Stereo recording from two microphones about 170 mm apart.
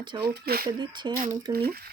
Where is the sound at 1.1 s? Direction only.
25° right (ahead or behind).